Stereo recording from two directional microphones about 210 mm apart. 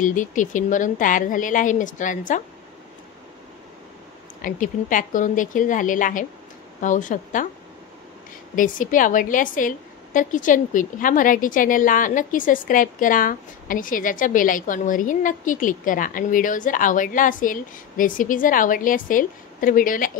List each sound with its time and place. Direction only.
0.0 s a woman's voice: 40° left (ahead or behind)
4.4 s a woman's voice: 40° left (ahead or behind)
8.5 s a woman's voice: 40° left (ahead or behind)